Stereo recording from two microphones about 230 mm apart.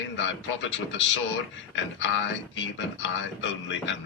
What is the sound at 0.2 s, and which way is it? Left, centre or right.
A man's voice, left.